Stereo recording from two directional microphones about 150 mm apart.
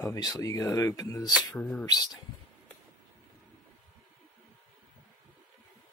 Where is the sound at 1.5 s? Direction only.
10° left (ahead or behind).